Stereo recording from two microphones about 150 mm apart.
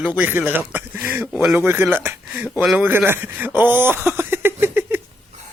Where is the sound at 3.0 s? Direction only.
15° right (ahead or behind).